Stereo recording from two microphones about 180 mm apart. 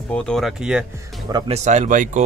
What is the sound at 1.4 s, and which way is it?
Speech, 40° right (ahead or behind).